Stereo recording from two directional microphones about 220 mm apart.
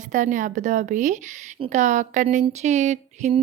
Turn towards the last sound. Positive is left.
turn(degrees=-30)  # may be behind; listen again after turning